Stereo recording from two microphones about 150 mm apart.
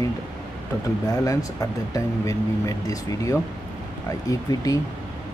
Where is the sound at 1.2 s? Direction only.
20° left (ahead or behind).